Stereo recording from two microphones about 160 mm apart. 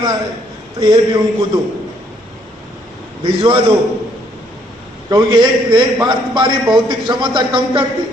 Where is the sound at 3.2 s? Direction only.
30° right (ahead or behind).